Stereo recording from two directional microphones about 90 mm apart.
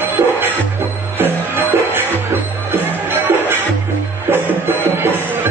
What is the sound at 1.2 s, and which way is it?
Music, 25° right (ahead or behind).